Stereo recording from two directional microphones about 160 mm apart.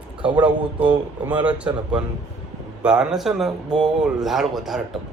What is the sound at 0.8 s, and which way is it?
Speech, 10° right (ahead or behind).